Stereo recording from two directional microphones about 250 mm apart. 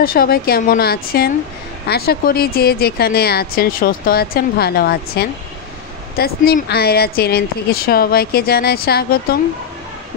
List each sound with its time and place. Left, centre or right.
0.0 s speech: left